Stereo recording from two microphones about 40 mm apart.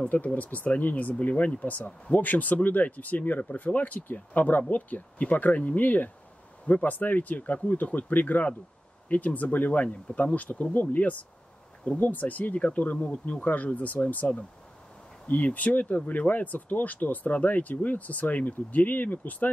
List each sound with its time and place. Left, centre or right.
0.1 s speech: left